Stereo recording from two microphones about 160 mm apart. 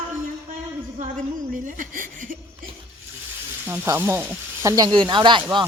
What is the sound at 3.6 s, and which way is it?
Speech, 15° right (ahead or behind).